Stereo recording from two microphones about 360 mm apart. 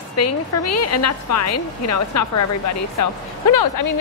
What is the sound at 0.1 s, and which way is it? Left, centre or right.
A woman's voice, left.